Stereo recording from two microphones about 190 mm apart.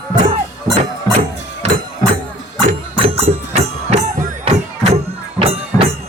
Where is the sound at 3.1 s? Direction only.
30° right (ahead or behind).